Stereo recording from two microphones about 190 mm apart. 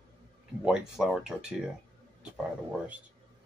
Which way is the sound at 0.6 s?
5° right (ahead or behind).